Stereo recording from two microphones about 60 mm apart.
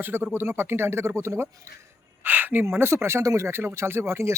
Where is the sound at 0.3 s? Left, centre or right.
Right.